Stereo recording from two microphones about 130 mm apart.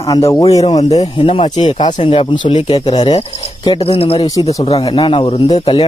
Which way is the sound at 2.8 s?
35° left (ahead or behind).